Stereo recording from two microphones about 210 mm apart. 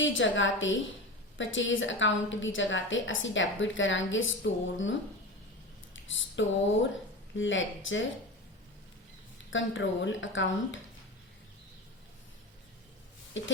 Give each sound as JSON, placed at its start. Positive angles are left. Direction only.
{"t": 0.0, "sound": "a woman's voice", "side_deg": 65}
{"t": 6.1, "sound": "a woman's voice", "side_deg": 65}
{"t": 9.5, "sound": "a woman's voice", "side_deg": 65}
{"t": 13.4, "sound": "a woman's voice", "side_deg": 60}